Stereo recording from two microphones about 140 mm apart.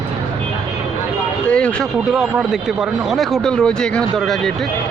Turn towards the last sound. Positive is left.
turn(degrees=0)  # may be behind; listen again after turning